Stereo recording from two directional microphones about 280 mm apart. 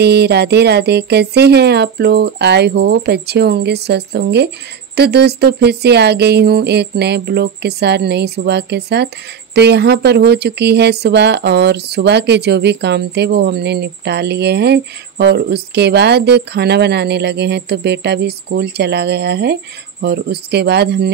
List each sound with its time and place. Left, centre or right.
0.0 s speech: right